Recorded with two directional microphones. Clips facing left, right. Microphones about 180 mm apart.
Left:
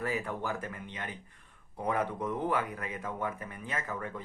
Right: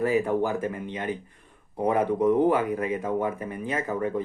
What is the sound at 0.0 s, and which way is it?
Speech, 20° right (ahead or behind).